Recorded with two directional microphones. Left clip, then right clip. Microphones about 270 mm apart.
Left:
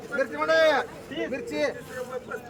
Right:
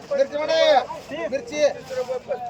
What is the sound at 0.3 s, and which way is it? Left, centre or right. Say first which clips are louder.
Speech: right 2 dB; centre.